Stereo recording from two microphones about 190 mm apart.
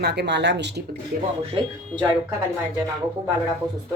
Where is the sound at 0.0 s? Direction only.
60° right (ahead or behind).